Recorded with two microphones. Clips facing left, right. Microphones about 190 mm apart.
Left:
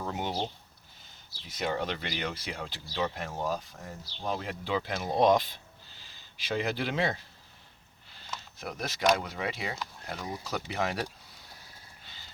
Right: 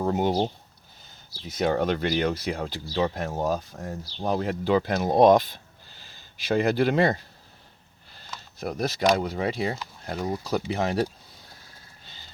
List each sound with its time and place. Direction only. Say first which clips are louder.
0.0 s speech: right 10 dB; 40° right (ahead or behind)
1.5 s speech: right 8 dB; 45° right (ahead or behind)
8.5 s speech: right 10 dB; 35° right (ahead or behind)